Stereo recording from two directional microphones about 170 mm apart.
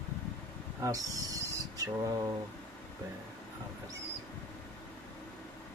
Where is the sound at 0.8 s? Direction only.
20° right (ahead or behind).